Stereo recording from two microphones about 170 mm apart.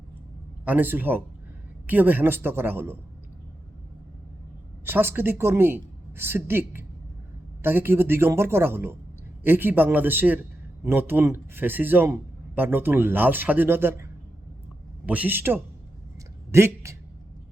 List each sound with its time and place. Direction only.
0.6 s speech: 10° right (ahead or behind)
4.9 s speech: 15° right (ahead or behind)